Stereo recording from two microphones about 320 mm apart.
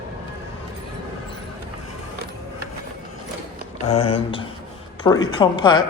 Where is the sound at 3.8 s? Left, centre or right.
Centre.